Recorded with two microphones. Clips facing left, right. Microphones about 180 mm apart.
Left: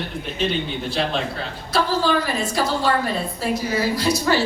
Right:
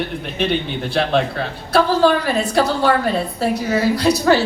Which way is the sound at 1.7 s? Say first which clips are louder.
Right 6 dB; 60° right (ahead or behind).